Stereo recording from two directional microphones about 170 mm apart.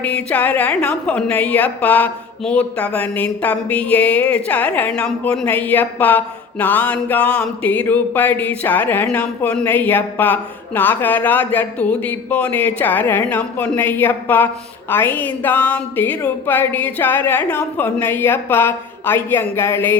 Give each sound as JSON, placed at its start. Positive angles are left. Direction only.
{"t": 0.0, "sound": "a woman's voice", "side_deg": 5}